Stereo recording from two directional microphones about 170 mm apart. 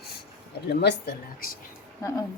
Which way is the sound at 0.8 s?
75° left (ahead or behind).